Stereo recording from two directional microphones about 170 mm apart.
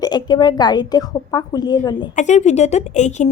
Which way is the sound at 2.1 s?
45° left (ahead or behind).